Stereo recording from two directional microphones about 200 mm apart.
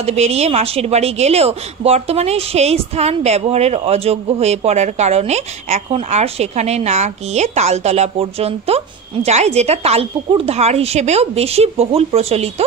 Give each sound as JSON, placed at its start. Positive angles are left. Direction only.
{"t": 0.0, "sound": "a woman's voice", "side_deg": -35}